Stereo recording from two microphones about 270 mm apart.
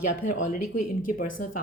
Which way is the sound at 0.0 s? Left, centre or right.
Left.